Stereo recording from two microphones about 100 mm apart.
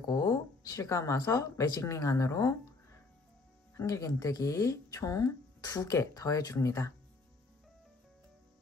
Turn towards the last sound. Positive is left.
turn(degrees=35)  # may be behind; listen again after turning